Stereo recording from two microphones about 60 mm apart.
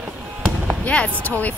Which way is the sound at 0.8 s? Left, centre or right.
Centre.